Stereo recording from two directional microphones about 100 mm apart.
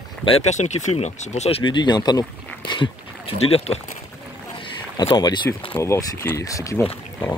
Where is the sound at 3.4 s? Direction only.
90° left.